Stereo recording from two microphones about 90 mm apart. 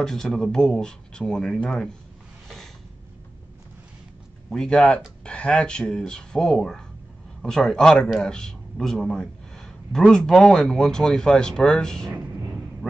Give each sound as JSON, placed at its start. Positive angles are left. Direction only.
{"t": 0.0, "sound": "speech", "side_deg": 5}
{"t": 2.4, "sound": "a sound", "side_deg": 5}
{"t": 4.5, "sound": "a man's voice", "side_deg": 5}